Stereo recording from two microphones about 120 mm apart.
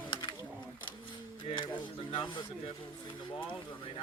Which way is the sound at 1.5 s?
40° left (ahead or behind).